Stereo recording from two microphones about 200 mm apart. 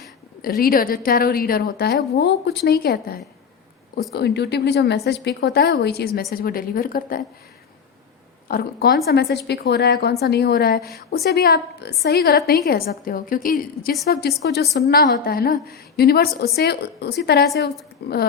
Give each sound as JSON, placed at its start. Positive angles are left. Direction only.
{"t": 0.4, "sound": "a woman's voice", "side_deg": 45}
{"t": 8.4, "sound": "a woman's voice", "side_deg": 50}